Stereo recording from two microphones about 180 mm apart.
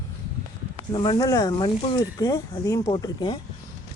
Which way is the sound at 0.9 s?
25° left (ahead or behind).